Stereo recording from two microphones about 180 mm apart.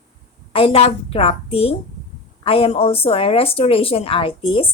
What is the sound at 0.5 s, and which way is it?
A woman's voice, 30° left (ahead or behind).